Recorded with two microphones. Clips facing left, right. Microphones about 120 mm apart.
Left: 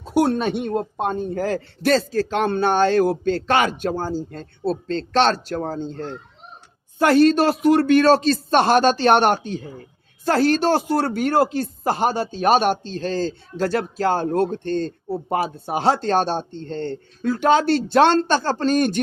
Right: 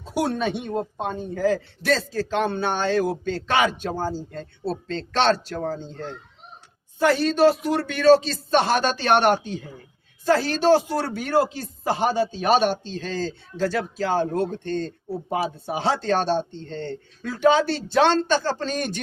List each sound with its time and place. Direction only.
0.1 s a man's voice: 50° left (ahead or behind)
7.0 s a man's voice: 60° left (ahead or behind); by 9.8 s 45° left (ahead or behind)
10.2 s speech: 55° left (ahead or behind)
13.6 s a man's voice: 60° left (ahead or behind)
14.5 s speech: 40° left (ahead or behind)